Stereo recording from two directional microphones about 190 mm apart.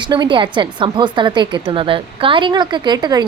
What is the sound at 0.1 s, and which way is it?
A woman's voice, 25° right (ahead or behind).